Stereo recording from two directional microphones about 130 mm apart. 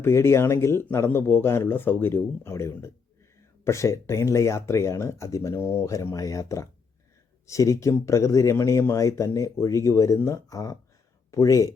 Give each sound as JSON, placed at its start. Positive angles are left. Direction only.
{"t": 0.0, "sound": "speech", "side_deg": 20}